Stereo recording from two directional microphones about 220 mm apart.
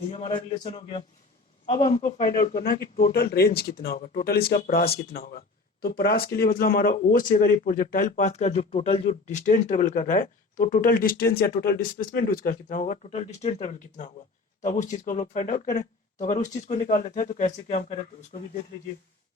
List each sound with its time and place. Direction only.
0.1 s a man's voice: 20° left (ahead or behind)
2.1 s speech: 40° left (ahead or behind)